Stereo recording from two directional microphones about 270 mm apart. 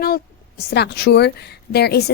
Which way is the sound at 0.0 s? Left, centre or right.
Left.